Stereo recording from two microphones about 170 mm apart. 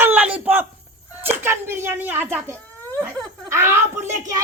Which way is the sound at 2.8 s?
10° left (ahead or behind).